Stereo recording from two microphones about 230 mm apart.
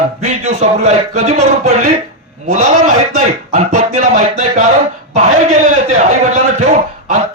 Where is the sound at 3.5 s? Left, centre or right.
Right.